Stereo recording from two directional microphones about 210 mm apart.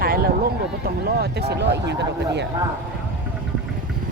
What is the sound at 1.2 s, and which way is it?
Speech, 50° right (ahead or behind).